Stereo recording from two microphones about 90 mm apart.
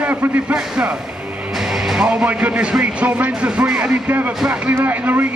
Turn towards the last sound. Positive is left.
turn(degrees=-20)  # may be behind; listen again after turning